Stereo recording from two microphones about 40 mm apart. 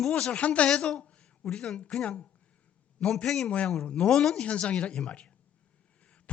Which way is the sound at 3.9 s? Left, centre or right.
Left.